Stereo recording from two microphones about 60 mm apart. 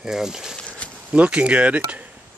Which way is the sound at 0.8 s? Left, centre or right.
Centre.